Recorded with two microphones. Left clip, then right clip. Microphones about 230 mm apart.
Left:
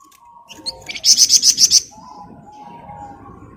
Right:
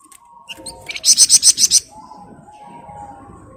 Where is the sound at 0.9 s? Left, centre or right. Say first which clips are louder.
Even; centre.